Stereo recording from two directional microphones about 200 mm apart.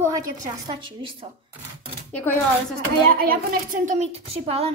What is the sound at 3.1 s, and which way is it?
A woman's voice, 45° right (ahead or behind).